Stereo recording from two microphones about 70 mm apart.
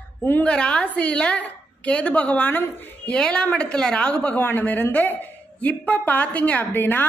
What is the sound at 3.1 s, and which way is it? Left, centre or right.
A woman's voice, centre.